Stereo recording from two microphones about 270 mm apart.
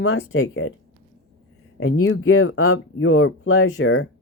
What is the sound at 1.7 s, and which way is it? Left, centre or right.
Speech, left.